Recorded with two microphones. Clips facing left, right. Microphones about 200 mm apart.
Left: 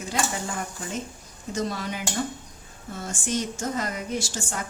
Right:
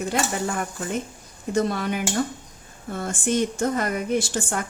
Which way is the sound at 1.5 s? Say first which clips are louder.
Right 6 dB; 60° right (ahead or behind).